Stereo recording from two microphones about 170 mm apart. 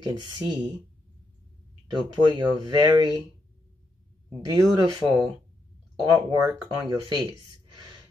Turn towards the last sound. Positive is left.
turn(degrees=-20)  # may be behind; listen again after turning